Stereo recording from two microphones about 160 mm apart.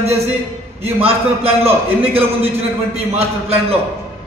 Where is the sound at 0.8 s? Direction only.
35° right (ahead or behind).